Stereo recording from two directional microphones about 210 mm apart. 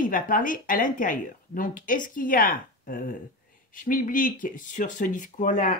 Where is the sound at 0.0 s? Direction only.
40° left (ahead or behind).